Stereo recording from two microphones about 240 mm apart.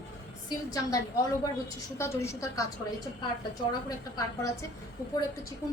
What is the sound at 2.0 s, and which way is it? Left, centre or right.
Speech, centre.